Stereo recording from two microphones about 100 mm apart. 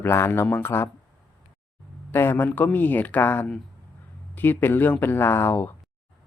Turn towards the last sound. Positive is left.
turn(degrees=20)  # may be behind; listen again after turning